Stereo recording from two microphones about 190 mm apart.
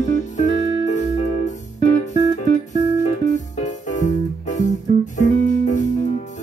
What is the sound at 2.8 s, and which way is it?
Music, 20° right (ahead or behind).